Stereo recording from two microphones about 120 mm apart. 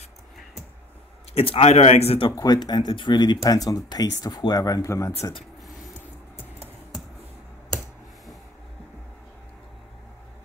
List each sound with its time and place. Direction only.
1.3 s speech: 55° left (ahead or behind)
2.3 s speech: 35° left (ahead or behind)